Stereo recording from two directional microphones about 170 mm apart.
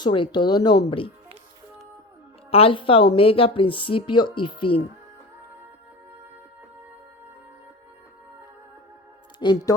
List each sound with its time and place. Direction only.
0.0 s speech: 30° left (ahead or behind)
2.5 s a woman's voice: 35° left (ahead or behind)
9.4 s speech: 25° left (ahead or behind)